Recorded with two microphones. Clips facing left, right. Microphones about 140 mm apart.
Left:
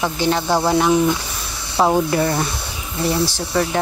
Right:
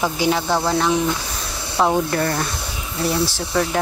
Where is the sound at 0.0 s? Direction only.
Centre (ahead or behind).